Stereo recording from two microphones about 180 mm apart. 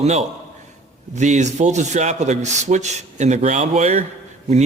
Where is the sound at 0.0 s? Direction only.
35° right (ahead or behind).